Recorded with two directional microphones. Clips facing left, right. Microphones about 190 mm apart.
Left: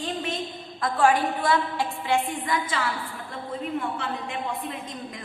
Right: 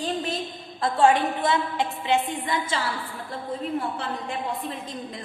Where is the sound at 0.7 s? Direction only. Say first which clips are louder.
Right 2 dB; 25° right (ahead or behind).